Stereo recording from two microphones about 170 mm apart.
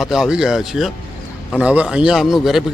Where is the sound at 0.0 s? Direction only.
Centre (ahead or behind).